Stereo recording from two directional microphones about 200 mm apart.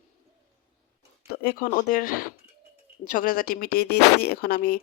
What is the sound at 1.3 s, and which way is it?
A woman's voice, 50° left (ahead or behind).